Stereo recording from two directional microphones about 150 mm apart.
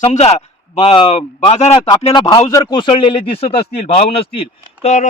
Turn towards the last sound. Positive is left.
turn(degrees=45)  # may be behind; listen again after turning